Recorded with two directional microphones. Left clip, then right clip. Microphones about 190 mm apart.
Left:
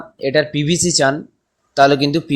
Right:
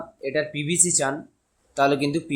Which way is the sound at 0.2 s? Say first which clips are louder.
Left 9 dB; 30° left (ahead or behind).